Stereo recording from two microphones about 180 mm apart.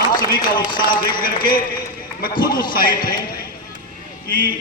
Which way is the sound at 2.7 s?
50° left (ahead or behind).